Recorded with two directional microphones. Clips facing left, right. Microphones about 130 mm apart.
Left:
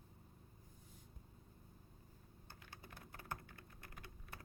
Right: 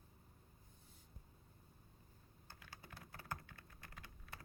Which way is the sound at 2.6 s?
20° left (ahead or behind).